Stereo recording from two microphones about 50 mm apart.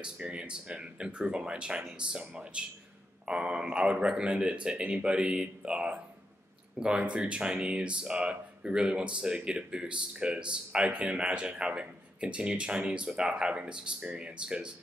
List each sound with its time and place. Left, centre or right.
0.0 s speech: centre